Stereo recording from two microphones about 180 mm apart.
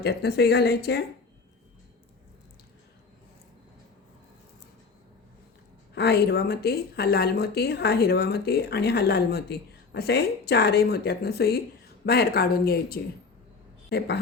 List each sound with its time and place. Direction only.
0.0 s speech: 65° left (ahead or behind)
5.9 s speech: 60° left (ahead or behind)